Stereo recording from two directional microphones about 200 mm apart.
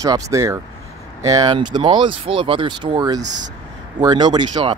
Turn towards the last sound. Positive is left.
turn(degrees=-20)  # may be behind; listen again after turning